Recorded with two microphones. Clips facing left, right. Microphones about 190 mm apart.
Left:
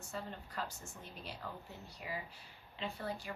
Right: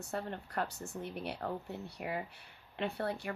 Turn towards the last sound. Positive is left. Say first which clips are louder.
# right 6 dB
turn(degrees=-65)  # may be behind; listen again after turning